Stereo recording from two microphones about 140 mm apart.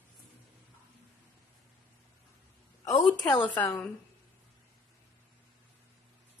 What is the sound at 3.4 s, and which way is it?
Speech, 10° left (ahead or behind).